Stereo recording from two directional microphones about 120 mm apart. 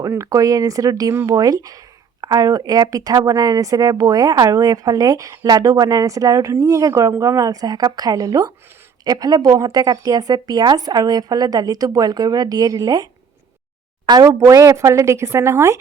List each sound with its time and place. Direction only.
0.1 s speech: 30° right (ahead or behind)
14.1 s speech: 30° right (ahead or behind)